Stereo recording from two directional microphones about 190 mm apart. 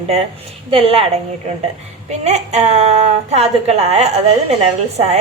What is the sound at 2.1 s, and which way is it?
A woman's voice, 35° right (ahead or behind).